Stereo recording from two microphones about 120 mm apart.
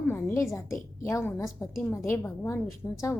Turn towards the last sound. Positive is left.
turn(degrees=20)  # may be behind; listen again after turning